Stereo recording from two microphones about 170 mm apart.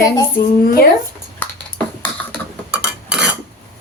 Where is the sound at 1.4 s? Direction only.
10° left (ahead or behind).